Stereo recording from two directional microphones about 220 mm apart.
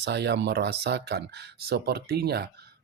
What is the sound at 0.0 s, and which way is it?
Speech, 50° right (ahead or behind).